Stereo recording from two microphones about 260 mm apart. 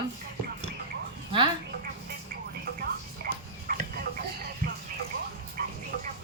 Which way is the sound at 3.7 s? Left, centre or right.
Right.